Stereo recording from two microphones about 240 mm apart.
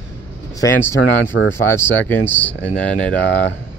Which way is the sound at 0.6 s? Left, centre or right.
Centre.